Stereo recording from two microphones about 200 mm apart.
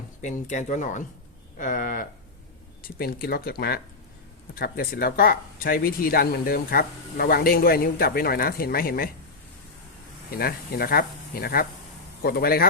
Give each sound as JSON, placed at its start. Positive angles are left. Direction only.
{"t": 0.2, "sound": "speech", "side_deg": 40}
{"t": 10.3, "sound": "speech", "side_deg": 50}